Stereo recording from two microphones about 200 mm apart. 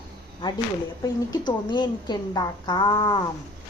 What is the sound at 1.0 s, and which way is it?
A woman's voice, 20° left (ahead or behind).